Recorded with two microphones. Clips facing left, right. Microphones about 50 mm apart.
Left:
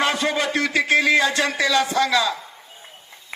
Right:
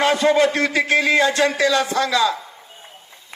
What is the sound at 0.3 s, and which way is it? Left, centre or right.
A man's voice, right.